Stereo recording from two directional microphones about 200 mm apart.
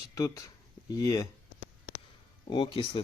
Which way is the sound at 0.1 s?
15° left (ahead or behind).